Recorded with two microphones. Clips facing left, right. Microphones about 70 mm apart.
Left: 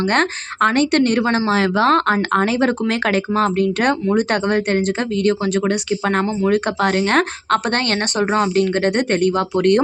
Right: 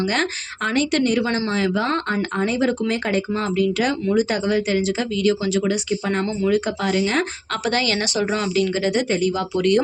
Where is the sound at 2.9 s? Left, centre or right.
Left.